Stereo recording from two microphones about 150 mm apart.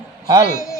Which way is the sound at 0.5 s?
20° left (ahead or behind).